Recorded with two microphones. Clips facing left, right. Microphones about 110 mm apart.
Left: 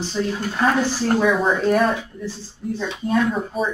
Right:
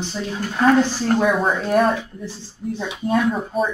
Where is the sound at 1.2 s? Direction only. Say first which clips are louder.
Left 1 dB; 5° right (ahead or behind).